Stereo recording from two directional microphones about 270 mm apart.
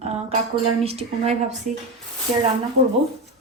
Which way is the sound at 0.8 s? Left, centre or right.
Right.